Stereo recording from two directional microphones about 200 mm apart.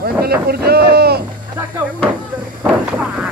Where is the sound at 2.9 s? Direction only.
5° right (ahead or behind).